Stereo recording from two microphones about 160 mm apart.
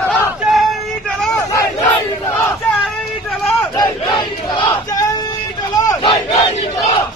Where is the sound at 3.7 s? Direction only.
25° left (ahead or behind).